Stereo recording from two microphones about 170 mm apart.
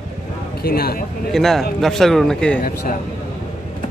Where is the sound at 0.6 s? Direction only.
60° left (ahead or behind).